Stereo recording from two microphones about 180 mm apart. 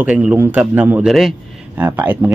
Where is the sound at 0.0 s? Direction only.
10° right (ahead or behind).